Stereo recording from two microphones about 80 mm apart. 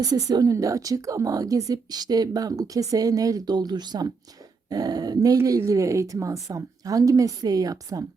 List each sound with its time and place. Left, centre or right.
0.0 s a woman's voice: right